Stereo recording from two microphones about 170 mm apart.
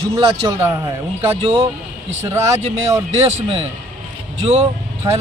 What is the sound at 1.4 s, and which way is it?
Speech, 35° right (ahead or behind).